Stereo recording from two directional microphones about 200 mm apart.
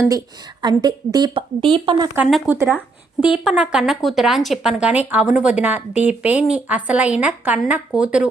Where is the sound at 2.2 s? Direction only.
Centre (ahead or behind).